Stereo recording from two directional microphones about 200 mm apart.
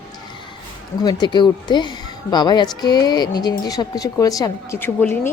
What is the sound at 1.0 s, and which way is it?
Speech, 20° left (ahead or behind).